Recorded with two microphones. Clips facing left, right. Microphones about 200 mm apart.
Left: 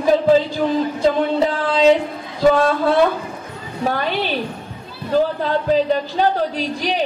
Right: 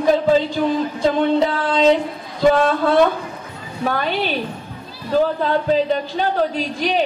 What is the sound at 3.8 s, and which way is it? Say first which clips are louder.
Speech: even; 40° left (ahead or behind).